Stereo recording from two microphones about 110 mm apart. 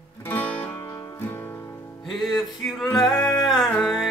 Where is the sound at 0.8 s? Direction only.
25° left (ahead or behind).